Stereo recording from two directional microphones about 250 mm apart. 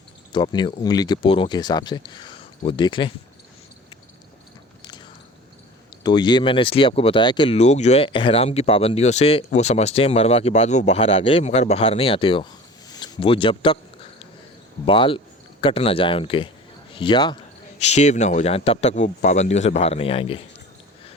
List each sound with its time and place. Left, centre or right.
0.3 s speech: centre
6.0 s speech: centre
12.9 s a sound: centre
14.8 s speech: left